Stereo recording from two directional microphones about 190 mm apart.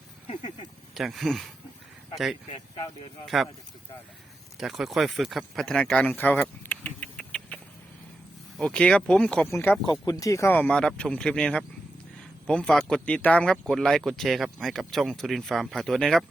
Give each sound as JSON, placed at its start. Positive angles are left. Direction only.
{"t": 0.3, "sound": "speech", "side_deg": 25}
{"t": 0.9, "sound": "speech", "side_deg": 0}
{"t": 3.2, "sound": "speech", "side_deg": 0}
{"t": 4.5, "sound": "speech", "side_deg": 0}